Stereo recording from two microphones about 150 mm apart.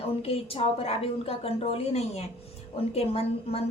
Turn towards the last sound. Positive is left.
turn(degrees=40)  # may be behind; listen again after turning